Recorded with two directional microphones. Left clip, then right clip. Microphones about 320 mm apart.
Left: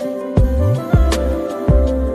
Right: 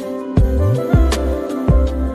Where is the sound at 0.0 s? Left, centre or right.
Centre.